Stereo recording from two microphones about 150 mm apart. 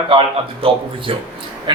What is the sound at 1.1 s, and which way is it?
Speech, 35° right (ahead or behind).